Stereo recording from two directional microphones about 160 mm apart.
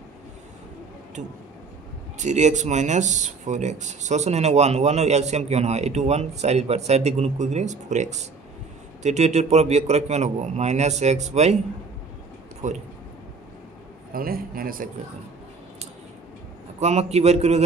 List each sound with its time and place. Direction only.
2.1 s speech: 45° right (ahead or behind)
12.6 s speech: 50° right (ahead or behind)
14.1 s a man's voice: 65° right (ahead or behind)
16.8 s speech: 45° right (ahead or behind)